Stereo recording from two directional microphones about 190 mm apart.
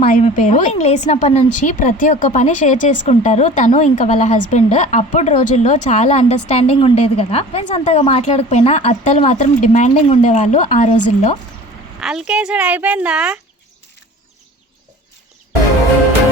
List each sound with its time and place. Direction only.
0.1 s a woman's voice: 45° left (ahead or behind)
11.9 s speech: 5° right (ahead or behind)